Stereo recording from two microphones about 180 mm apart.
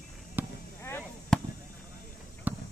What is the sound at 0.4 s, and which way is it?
Basketball bounce, 10° right (ahead or behind).